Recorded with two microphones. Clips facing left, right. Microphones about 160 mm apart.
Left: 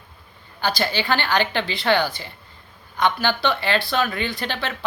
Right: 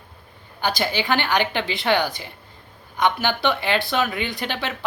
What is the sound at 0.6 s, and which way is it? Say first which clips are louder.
Speech: even; 15° right (ahead or behind).